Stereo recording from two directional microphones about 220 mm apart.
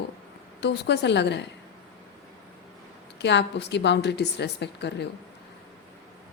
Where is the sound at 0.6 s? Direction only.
50° left (ahead or behind).